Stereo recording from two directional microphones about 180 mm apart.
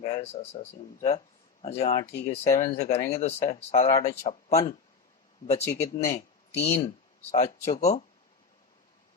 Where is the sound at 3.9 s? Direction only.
20° left (ahead or behind).